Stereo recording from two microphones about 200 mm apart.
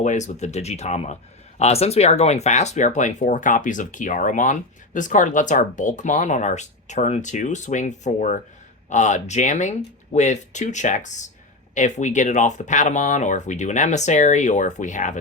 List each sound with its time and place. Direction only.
0.0 s speech: 35° left (ahead or behind)